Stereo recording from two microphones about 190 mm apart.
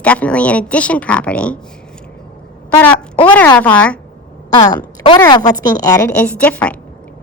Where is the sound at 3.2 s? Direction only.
10° left (ahead or behind).